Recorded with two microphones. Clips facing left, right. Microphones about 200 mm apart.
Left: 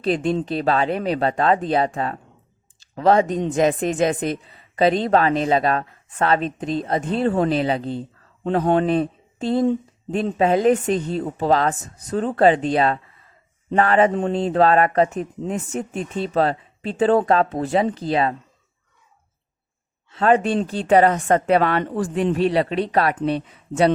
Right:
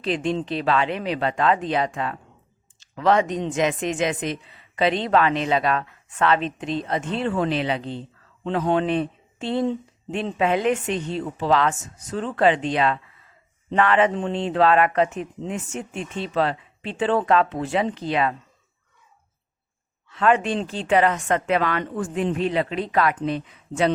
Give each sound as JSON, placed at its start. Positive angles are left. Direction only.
{"t": 0.0, "sound": "speech", "side_deg": 40}
{"t": 20.1, "sound": "speech", "side_deg": 35}